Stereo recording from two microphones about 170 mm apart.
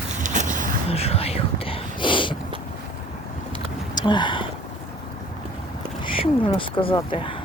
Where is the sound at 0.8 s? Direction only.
35° left (ahead or behind).